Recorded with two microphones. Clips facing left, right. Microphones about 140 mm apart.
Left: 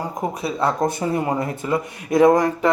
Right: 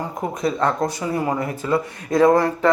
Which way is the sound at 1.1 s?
25° left (ahead or behind).